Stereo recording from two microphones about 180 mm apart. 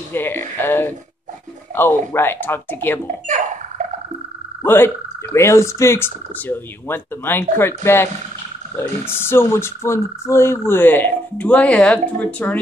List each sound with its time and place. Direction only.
0.1 s speech: 10° left (ahead or behind)
3.3 s music: 45° right (ahead or behind)
4.6 s speech: 15° left (ahead or behind)